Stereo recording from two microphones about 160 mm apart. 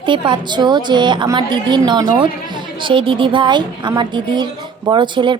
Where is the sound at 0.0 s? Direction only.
30° right (ahead or behind).